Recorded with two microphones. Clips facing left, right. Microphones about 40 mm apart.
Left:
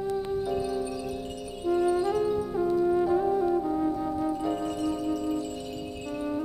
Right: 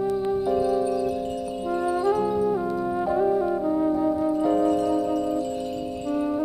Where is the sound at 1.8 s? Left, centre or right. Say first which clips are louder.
Right 6 dB; centre.